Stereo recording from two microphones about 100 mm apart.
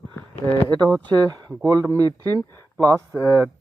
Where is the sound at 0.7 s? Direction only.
45° right (ahead or behind).